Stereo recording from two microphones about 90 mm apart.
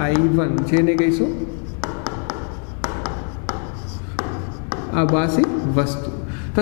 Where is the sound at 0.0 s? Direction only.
20° left (ahead or behind).